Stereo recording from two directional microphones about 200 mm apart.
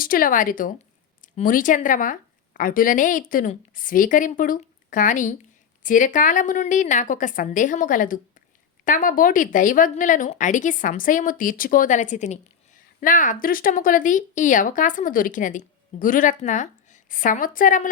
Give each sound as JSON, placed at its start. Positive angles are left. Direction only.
{"t": 0.0, "sound": "speech", "side_deg": 45}